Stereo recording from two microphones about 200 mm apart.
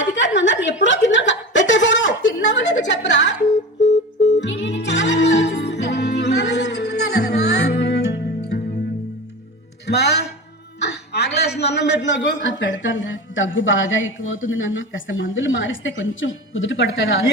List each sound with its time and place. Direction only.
0.0 s chuckle: 65° left (ahead or behind)
4.4 s music: 65° left (ahead or behind)
9.8 s music: 55° left (ahead or behind)
10.8 s a sound: 55° left (ahead or behind); by 17.2 s 75° left (ahead or behind)